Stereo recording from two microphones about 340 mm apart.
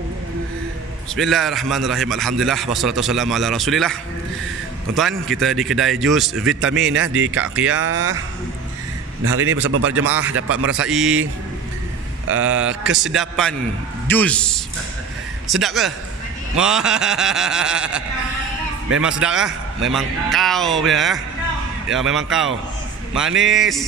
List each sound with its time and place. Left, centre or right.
1.1 s a man's voice: centre
6.9 s speech: right
7.3 s a man's voice: centre
7.7 s speech: right
9.2 s speech: right
10.5 s a man's voice: centre
12.4 s a man's voice: centre